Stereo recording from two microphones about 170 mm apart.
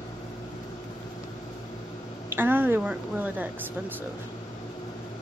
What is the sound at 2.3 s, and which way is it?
A woman's voice, 10° right (ahead or behind).